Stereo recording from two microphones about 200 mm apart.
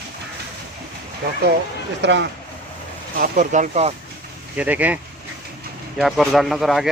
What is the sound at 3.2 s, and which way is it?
Speech, 40° right (ahead or behind).